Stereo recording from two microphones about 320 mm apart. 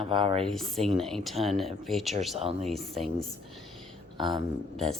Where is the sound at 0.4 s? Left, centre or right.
Centre.